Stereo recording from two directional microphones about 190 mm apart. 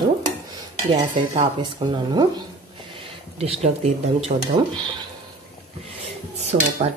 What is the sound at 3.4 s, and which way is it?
Dishes, 35° right (ahead or behind).